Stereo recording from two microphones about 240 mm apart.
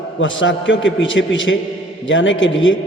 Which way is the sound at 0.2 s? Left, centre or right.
Left.